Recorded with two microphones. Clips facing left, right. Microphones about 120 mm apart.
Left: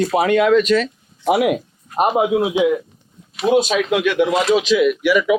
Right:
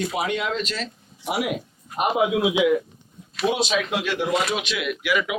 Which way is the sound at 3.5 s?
45° left (ahead or behind).